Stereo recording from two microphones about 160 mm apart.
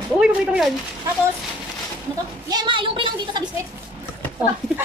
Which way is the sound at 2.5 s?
30° right (ahead or behind).